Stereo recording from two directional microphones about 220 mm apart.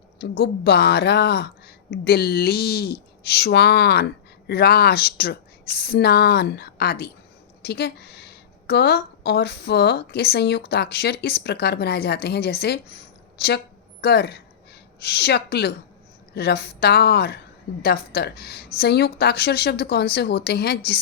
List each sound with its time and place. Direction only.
0.2 s speech: 50° left (ahead or behind)